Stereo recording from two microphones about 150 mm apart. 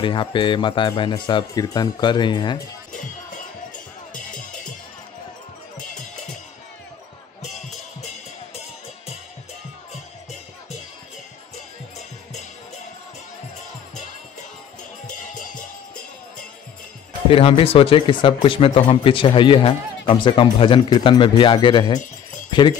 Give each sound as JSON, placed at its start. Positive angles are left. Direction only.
{"t": 0.0, "sound": "speech", "side_deg": 35}
{"t": 15.0, "sound": "music", "side_deg": 60}
{"t": 17.3, "sound": "speech", "side_deg": 40}